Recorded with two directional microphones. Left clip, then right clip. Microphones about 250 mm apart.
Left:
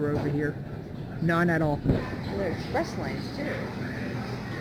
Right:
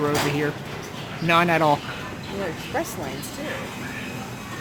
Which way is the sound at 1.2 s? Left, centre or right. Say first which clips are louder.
Right 7 dB; centre.